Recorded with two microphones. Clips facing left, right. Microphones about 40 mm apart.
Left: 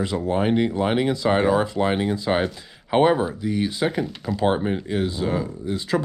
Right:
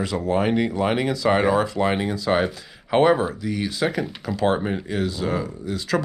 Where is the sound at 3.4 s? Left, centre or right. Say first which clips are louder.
Left 1 dB; left.